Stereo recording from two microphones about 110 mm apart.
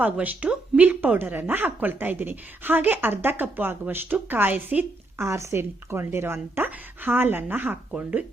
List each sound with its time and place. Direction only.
0.0 s speech: 15° right (ahead or behind)